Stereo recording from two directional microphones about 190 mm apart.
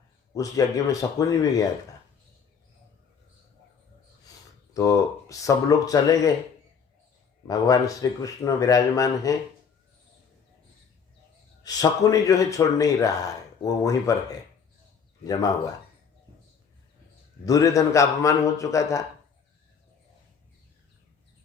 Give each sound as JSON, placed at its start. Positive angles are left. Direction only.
{"t": 0.3, "sound": "a man's voice", "side_deg": 15}
{"t": 4.7, "sound": "a man's voice", "side_deg": 15}
{"t": 7.4, "sound": "a man's voice", "side_deg": 20}
{"t": 11.6, "sound": "a man's voice", "side_deg": 20}
{"t": 15.2, "sound": "speech", "side_deg": 20}
{"t": 17.4, "sound": "a man's voice", "side_deg": 20}